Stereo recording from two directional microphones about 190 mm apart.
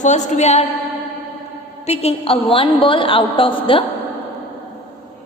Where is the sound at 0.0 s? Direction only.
40° left (ahead or behind).